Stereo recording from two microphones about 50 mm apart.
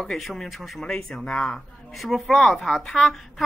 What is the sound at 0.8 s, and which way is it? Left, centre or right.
Speech, centre.